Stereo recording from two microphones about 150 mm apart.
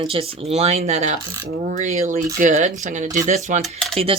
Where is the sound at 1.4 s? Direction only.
60° right (ahead or behind).